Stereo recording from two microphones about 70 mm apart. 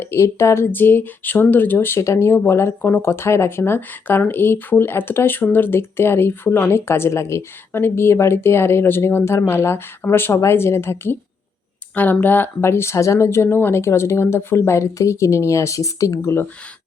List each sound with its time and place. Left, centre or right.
0.0 s speech: left